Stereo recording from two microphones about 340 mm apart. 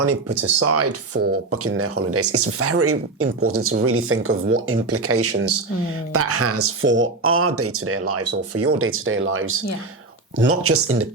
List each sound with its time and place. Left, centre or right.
0.0 s speech: right